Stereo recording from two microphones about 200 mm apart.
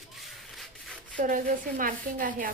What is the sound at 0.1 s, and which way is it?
Rub, centre (ahead or behind).